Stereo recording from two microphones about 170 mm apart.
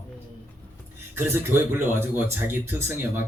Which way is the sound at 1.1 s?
15° right (ahead or behind).